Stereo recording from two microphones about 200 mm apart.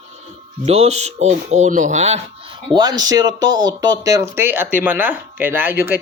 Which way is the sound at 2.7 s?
20° right (ahead or behind).